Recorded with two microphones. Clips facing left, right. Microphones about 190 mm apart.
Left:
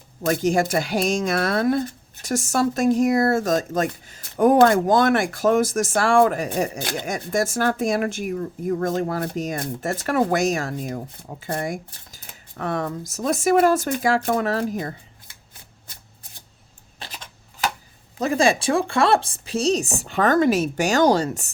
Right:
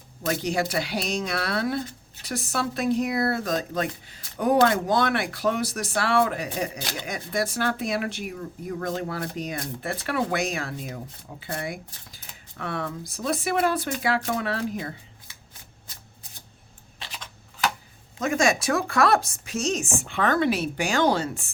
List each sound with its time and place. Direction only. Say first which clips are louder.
0.3 s speech: left 6 dB; 50° left (ahead or behind)
18.2 s speech: left 3 dB; 30° left (ahead or behind)